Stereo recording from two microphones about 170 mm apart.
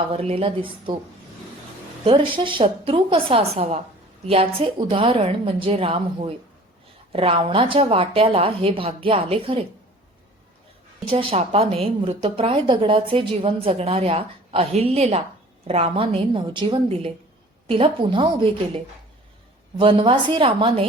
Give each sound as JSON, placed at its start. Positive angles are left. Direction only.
{"t": 0.1, "sound": "a woman's voice", "side_deg": -35}
{"t": 2.0, "sound": "a woman's voice", "side_deg": -30}
{"t": 11.0, "sound": "a woman's voice", "side_deg": -35}